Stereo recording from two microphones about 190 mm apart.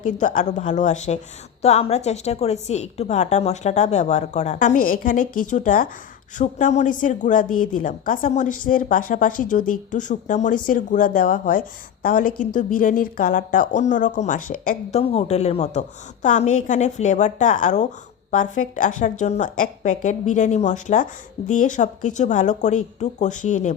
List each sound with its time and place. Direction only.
0.0 s a woman's voice: 45° left (ahead or behind)